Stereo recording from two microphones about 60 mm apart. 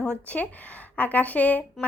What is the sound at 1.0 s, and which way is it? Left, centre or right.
Speech, left.